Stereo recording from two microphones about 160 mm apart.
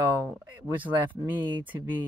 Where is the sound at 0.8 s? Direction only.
10° right (ahead or behind).